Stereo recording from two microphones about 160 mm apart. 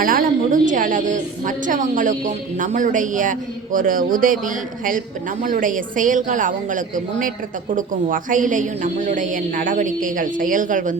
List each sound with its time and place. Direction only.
0.0 s a woman's voice: 60° right (ahead or behind)